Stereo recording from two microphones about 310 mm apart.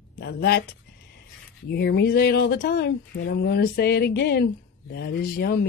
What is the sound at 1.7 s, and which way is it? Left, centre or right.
Speech, left.